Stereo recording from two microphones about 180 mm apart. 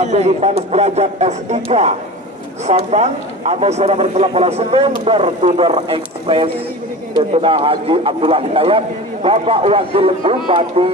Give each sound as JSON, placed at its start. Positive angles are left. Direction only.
{"t": 0.0, "sound": "speech", "side_deg": -40}